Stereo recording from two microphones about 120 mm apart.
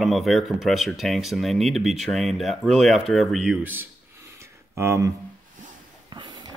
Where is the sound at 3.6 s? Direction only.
15° right (ahead or behind).